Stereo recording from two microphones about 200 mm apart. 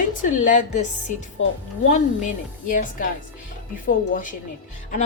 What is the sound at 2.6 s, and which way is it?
A woman's voice, 40° left (ahead or behind).